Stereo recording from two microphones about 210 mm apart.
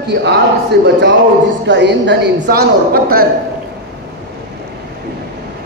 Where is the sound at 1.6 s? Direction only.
55° right (ahead or behind).